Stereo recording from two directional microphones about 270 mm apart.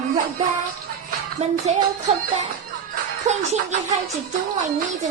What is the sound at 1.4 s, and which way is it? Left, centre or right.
Music, right.